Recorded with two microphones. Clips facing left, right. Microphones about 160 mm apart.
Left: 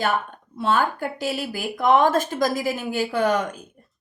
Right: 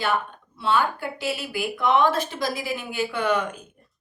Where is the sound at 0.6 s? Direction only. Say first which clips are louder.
Left 1 dB; 45° left (ahead or behind).